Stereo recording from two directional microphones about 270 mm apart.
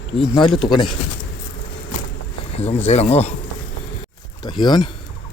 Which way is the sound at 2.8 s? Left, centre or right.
Left.